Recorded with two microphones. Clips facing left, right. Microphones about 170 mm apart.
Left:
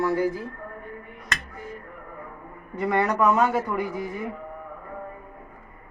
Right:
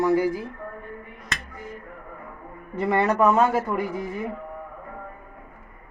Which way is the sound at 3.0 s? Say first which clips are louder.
Right 2 dB; 25° right (ahead or behind).